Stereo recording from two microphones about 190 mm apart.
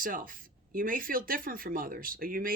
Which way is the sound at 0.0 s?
45° right (ahead or behind).